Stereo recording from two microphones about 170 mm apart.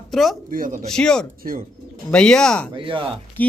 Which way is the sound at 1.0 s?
5° left (ahead or behind).